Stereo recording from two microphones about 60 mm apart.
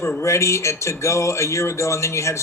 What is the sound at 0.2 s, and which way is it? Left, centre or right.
Speech, left.